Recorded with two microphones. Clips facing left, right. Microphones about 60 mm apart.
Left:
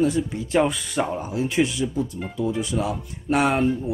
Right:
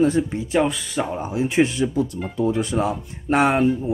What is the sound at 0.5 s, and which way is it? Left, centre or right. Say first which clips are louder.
Speech: even; centre.